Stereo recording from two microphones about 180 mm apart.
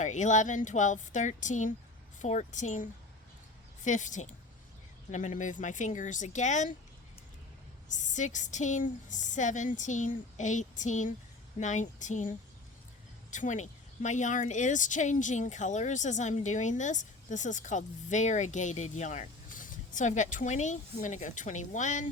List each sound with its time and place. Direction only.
0.0 s speech: 40° left (ahead or behind)
3.8 s speech: 45° left (ahead or behind)
7.9 s speech: 45° left (ahead or behind)
13.3 s speech: 45° left (ahead or behind)